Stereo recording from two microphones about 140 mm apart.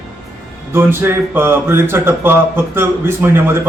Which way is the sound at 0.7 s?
15° right (ahead or behind).